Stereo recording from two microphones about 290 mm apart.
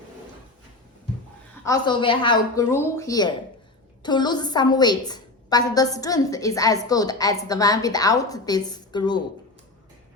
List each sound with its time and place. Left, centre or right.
1.6 s a woman's voice: centre